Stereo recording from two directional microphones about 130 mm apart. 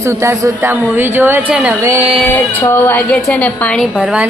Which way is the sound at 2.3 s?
15° left (ahead or behind).